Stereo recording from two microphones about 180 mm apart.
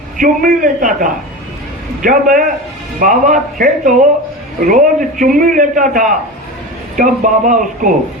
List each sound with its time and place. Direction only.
0.2 s speech: 50° right (ahead or behind)